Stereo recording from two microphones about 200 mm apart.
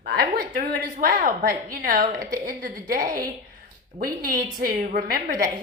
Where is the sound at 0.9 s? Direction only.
40° right (ahead or behind).